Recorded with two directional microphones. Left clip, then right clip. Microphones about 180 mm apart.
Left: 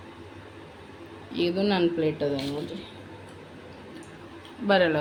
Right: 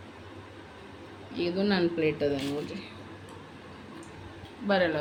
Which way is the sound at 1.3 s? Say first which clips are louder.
Left 4 dB; 20° left (ahead or behind).